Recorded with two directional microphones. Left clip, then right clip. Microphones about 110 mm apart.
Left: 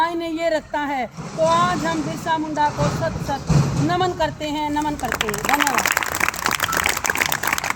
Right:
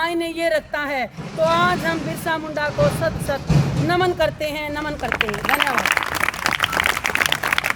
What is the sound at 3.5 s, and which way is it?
Music, 35° left (ahead or behind).